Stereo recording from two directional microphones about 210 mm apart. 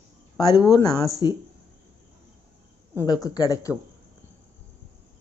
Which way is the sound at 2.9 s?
20° left (ahead or behind).